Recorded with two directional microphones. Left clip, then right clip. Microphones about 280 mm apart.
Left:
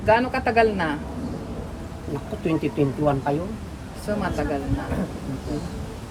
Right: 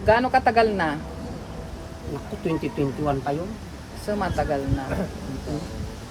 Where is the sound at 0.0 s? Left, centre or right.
Right.